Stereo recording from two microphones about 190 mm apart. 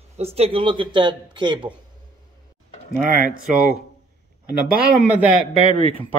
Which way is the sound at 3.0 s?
50° right (ahead or behind).